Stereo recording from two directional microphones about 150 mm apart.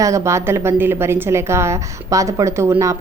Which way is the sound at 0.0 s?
20° right (ahead or behind).